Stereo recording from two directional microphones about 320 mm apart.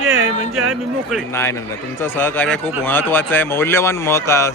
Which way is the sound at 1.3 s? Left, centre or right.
Centre.